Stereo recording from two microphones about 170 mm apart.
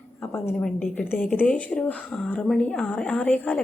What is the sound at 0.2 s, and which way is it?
A woman's voice, 10° left (ahead or behind).